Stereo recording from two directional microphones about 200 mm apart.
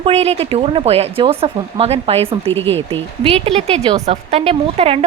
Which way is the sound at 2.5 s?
10° left (ahead or behind).